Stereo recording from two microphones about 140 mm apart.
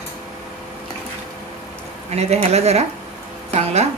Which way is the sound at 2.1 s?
50° right (ahead or behind).